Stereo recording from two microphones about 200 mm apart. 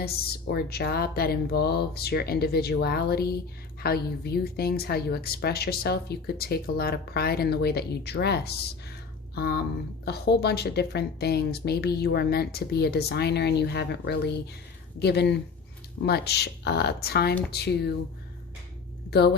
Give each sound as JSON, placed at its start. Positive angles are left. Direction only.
{"t": 0.0, "sound": "speech", "side_deg": 50}
{"t": 9.3, "sound": "a sound", "side_deg": 50}
{"t": 10.1, "sound": "speech", "side_deg": 55}
{"t": 19.1, "sound": "speech", "side_deg": 55}